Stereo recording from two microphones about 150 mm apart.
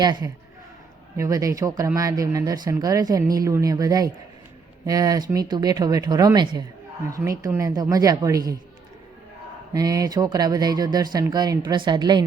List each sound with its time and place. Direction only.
0.0 s speech: 25° right (ahead or behind)
9.7 s speech: 25° right (ahead or behind)